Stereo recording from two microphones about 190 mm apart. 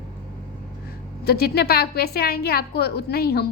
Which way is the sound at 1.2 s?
55° left (ahead or behind).